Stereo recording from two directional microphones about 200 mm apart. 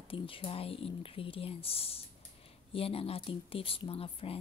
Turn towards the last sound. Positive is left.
turn(degrees=30)  # may be behind; listen again after turning